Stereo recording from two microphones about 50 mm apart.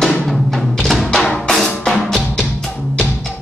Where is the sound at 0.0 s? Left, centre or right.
Centre.